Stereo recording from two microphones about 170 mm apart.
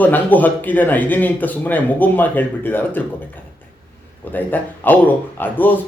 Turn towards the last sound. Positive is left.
turn(degrees=10)  # may be behind; listen again after turning